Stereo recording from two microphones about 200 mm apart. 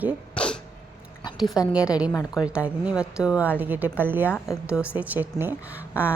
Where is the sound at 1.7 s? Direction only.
5° right (ahead or behind).